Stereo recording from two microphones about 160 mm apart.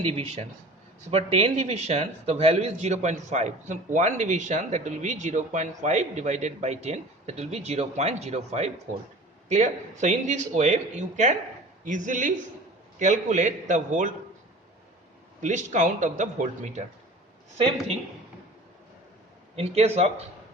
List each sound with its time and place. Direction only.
0.0 s a man's voice: 40° right (ahead or behind)
15.4 s a man's voice: 50° right (ahead or behind)
19.5 s speech: 40° right (ahead or behind)